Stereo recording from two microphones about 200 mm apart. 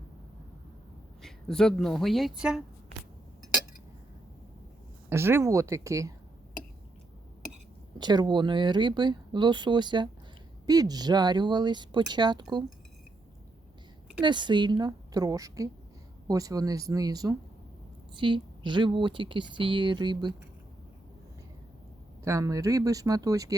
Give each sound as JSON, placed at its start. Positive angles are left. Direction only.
{"t": 1.2, "sound": "speech", "side_deg": 5}
{"t": 5.0, "sound": "speech", "side_deg": -10}
{"t": 7.9, "sound": "speech", "side_deg": -20}
{"t": 14.2, "sound": "speech", "side_deg": -25}
{"t": 22.2, "sound": "speech", "side_deg": -15}